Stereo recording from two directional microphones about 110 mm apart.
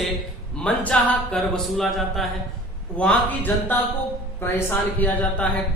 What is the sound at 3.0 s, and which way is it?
Speech, 15° left (ahead or behind).